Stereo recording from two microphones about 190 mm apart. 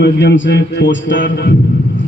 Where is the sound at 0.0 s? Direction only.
65° left (ahead or behind).